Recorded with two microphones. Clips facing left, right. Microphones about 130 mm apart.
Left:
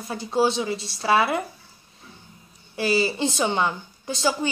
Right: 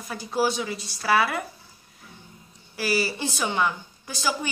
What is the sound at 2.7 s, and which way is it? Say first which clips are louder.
Speech: left 4 dB; 25° left (ahead or behind).